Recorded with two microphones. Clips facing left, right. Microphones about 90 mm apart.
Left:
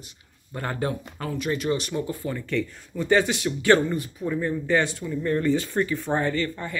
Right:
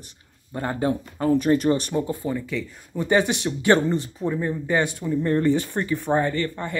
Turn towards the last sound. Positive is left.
turn(degrees=-20)  # may be behind; listen again after turning